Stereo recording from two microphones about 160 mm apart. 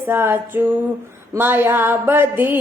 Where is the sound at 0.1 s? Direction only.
15° right (ahead or behind).